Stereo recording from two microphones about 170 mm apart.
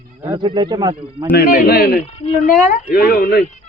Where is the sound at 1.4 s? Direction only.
60° left (ahead or behind).